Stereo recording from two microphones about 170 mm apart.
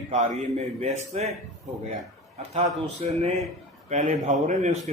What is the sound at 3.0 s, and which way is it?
Speech, 40° right (ahead or behind).